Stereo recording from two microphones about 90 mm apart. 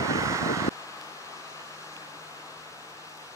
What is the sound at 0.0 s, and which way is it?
Vehicle, 35° right (ahead or behind).